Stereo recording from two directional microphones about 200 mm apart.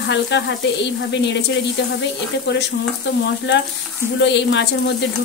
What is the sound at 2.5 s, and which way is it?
Speech, 60° left (ahead or behind).